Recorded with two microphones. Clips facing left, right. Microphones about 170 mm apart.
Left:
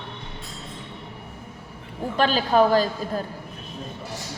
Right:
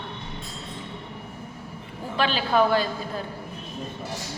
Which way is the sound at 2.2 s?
40° left (ahead or behind).